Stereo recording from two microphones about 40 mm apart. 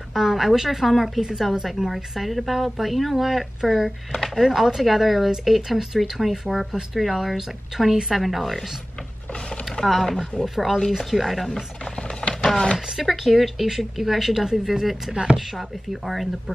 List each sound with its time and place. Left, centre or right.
0.1 s a woman's voice: centre
9.7 s a woman's voice: centre
11.8 s a sound: left
12.4 s music: centre
12.7 s a woman's voice: centre